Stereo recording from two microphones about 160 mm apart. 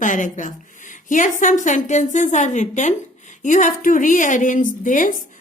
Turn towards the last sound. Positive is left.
turn(degrees=55)  # may be behind; listen again after turning